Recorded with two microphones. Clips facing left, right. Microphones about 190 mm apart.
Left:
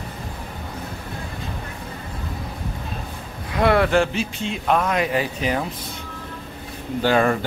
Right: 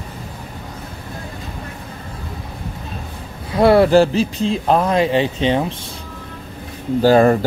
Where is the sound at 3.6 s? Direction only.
35° right (ahead or behind).